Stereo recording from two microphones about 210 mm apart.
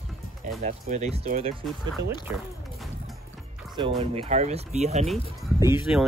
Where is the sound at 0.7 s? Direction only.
35° right (ahead or behind).